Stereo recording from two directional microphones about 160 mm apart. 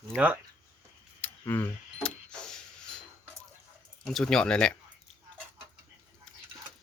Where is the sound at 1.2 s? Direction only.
10° left (ahead or behind).